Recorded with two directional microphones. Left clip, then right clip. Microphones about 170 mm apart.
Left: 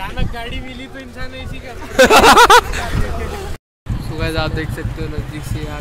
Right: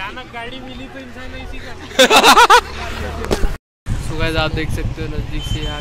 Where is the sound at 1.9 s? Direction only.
50° left (ahead or behind).